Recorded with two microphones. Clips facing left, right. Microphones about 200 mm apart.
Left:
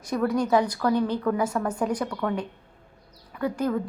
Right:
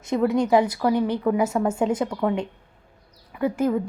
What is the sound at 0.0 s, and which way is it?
Speech, 25° right (ahead or behind).